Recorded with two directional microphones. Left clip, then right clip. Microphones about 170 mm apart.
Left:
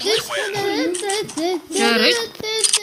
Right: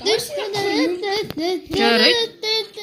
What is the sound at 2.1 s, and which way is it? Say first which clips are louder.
Child singing: right 3 dB; 45° left (ahead or behind).